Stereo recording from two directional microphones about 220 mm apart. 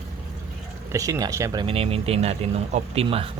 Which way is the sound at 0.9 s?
15° right (ahead or behind).